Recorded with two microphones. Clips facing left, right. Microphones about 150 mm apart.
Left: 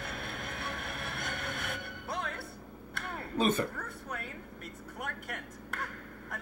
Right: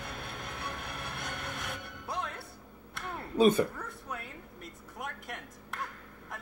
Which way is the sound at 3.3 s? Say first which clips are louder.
Right 5 dB; 15° right (ahead or behind).